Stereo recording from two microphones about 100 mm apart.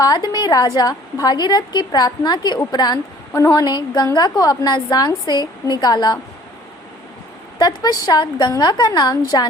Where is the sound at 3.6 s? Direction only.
45° left (ahead or behind).